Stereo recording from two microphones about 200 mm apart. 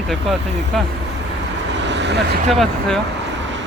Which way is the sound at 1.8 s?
60° right (ahead or behind).